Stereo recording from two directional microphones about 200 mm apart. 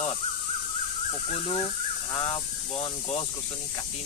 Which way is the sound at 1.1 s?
25° left (ahead or behind).